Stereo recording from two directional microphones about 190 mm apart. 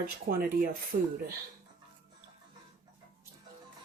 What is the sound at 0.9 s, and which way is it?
Speech, 40° right (ahead or behind).